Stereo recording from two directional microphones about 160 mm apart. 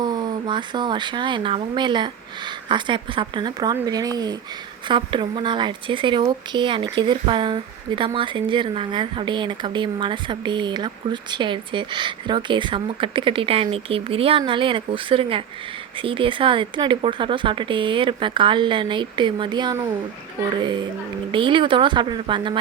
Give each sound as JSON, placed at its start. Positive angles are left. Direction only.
{"t": 0.0, "sound": "speech", "side_deg": -25}
{"t": 21.3, "sound": "speech", "side_deg": -30}